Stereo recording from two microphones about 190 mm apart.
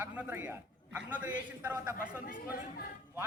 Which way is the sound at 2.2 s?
50° left (ahead or behind).